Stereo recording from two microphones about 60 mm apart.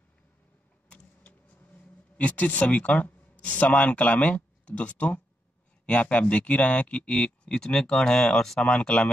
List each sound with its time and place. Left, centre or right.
1.2 s vehicle: left
2.1 s speech: left